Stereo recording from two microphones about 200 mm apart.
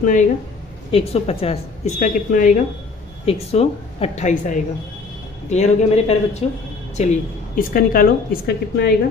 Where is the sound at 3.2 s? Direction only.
30° left (ahead or behind).